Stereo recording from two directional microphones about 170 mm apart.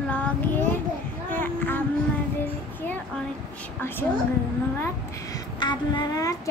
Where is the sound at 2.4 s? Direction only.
10° left (ahead or behind).